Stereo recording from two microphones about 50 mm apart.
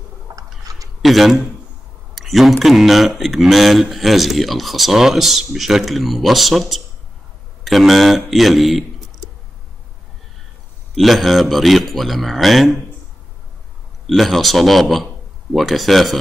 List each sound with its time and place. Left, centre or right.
0.3 s a sound: right
1.0 s a man's voice: centre
2.1 s a sound: centre
2.6 s speech: centre
11.0 s speech: centre
14.0 s speech: centre